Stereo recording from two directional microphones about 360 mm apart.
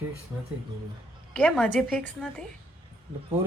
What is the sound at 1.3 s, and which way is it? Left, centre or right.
A woman's voice, centre.